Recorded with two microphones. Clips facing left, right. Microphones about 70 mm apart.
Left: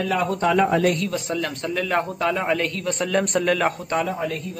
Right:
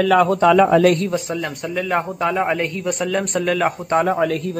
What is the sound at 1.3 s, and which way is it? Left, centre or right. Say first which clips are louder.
A man's voice: right 1 dB; centre.